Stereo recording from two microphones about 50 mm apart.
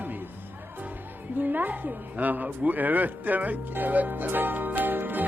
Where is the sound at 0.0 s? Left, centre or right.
Right.